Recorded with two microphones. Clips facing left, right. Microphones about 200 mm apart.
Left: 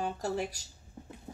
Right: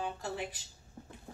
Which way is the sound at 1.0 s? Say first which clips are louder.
Left 3 dB; 15° left (ahead or behind).